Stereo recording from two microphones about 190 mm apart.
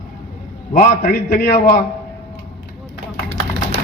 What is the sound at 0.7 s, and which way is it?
Speech, 45° left (ahead or behind).